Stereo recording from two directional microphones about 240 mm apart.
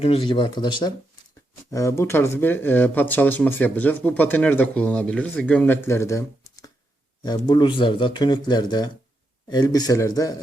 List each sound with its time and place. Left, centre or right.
0.0 s speech: left